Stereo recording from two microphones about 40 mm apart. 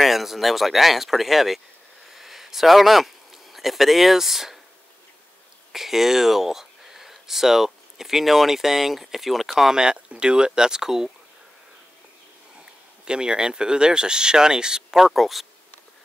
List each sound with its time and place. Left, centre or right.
0.0 s speech: centre
2.0 s a sound: centre
3.5 s speech: centre
5.7 s speech: centre
9.6 s speech: centre
13.0 s speech: right
15.0 s speech: centre